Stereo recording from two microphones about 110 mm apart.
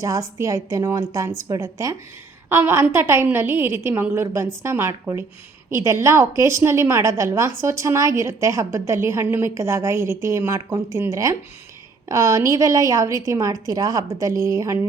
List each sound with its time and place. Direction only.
0.0 s a woman's voice: 30° right (ahead or behind)